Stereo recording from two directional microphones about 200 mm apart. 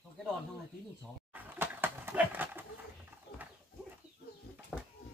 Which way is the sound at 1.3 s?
10° right (ahead or behind).